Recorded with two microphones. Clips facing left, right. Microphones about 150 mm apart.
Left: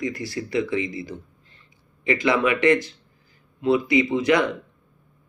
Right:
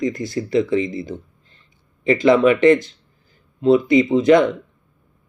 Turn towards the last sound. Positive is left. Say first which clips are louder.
# right 7 dB
turn(degrees=-25)  # may be behind; listen again after turning